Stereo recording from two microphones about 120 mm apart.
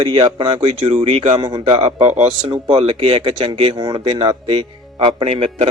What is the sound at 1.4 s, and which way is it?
Speech, 35° right (ahead or behind).